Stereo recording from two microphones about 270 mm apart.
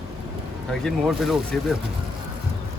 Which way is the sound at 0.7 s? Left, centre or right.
Centre.